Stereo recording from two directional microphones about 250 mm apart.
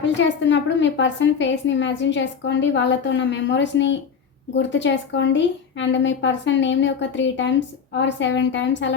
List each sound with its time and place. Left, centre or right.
0.0 s a woman's voice: left